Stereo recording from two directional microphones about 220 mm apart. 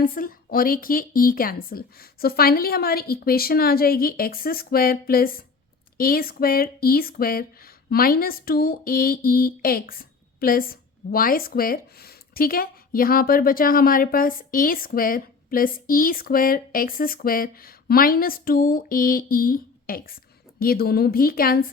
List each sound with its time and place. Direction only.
0.0 s a woman's voice: 40° left (ahead or behind)